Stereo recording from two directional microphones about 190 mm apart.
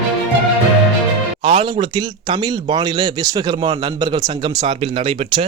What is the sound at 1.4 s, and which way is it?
Speech, 25° right (ahead or behind).